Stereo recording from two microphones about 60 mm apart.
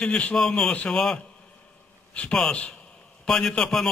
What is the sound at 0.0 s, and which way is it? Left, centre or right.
A man's voice, centre.